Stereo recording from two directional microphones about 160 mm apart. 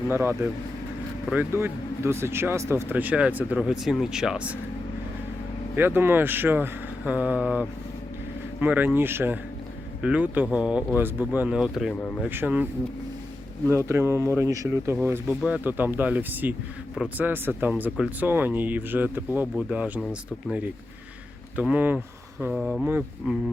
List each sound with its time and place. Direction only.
0.1 s speech: 15° right (ahead or behind)
5.7 s speech: 15° right (ahead or behind)
13.7 s speech: 15° right (ahead or behind)
21.5 s speech: 10° right (ahead or behind)